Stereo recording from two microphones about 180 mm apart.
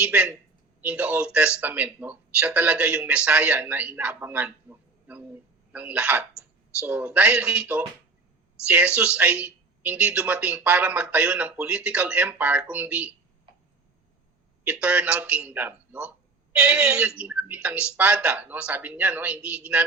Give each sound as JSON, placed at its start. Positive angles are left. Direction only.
{"t": 0.0, "sound": "a woman's voice", "side_deg": -5}
{"t": 14.6, "sound": "speech", "side_deg": -5}